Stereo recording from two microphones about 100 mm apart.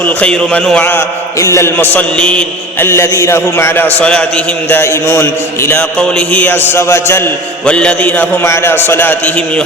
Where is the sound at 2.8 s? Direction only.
25° left (ahead or behind).